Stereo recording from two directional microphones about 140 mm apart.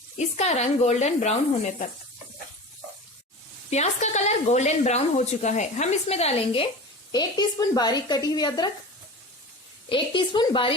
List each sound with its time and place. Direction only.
0.2 s speech: 50° left (ahead or behind)
3.7 s speech: 55° left (ahead or behind)
7.1 s speech: 30° left (ahead or behind)
9.9 s a woman's voice: 35° left (ahead or behind)